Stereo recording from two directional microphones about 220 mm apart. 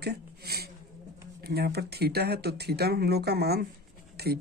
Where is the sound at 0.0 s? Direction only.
45° right (ahead or behind).